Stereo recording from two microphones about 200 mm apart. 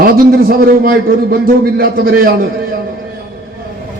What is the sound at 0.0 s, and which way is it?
A man's voice, 50° right (ahead or behind).